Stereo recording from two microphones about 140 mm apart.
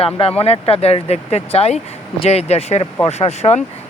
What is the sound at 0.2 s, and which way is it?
A man's voice, 45° left (ahead or behind).